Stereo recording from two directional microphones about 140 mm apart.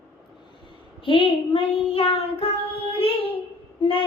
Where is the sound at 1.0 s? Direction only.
40° left (ahead or behind).